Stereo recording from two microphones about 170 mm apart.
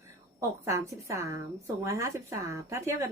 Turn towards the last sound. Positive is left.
turn(degrees=-15)  # may be behind; listen again after turning